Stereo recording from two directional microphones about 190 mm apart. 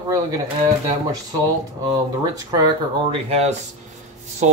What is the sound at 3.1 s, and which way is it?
Speech, 30° right (ahead or behind).